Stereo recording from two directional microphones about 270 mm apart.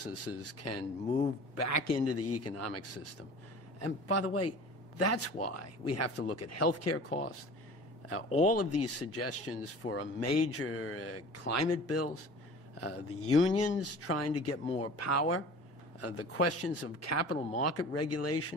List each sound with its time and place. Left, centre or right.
0.0 s speech: left
8.3 s speech: left
8.5 s speech: left
17.4 s speech: left
17.6 s speech: left